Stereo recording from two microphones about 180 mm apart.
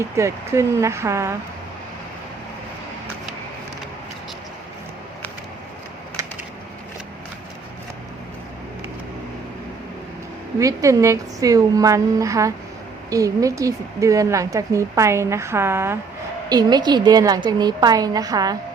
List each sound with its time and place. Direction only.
0.0 s a woman's voice: 15° right (ahead or behind)
10.6 s a woman's voice: 20° right (ahead or behind)